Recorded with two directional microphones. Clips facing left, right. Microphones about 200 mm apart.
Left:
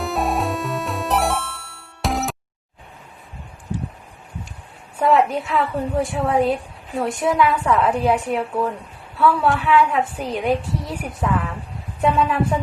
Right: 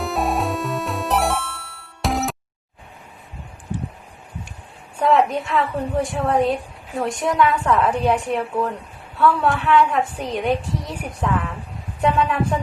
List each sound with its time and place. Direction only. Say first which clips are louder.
0.0 s music: even; centre (ahead or behind)
4.9 s a woman's voice: even; 5° left (ahead or behind)